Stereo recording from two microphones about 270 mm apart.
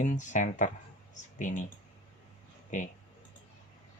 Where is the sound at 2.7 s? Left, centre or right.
Left.